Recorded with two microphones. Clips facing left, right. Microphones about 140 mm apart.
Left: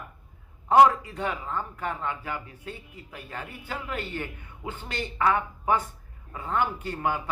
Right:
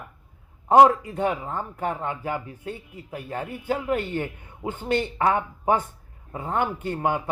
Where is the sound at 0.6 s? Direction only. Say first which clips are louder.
Right 3 dB; 30° right (ahead or behind).